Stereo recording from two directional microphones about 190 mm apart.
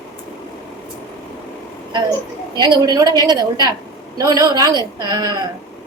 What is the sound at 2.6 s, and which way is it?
A woman's voice, 20° right (ahead or behind).